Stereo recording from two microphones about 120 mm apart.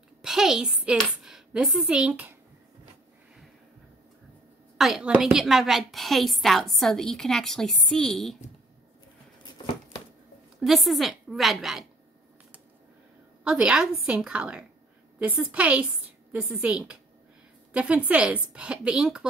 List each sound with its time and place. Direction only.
0.2 s a woman's voice: 5° right (ahead or behind)
4.7 s a woman's voice: 5° right (ahead or behind)
10.6 s a woman's voice: centre (ahead or behind)
13.4 s a woman's voice: 10° right (ahead or behind)